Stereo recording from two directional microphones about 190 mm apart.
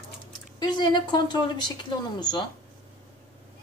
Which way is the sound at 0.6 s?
25° left (ahead or behind).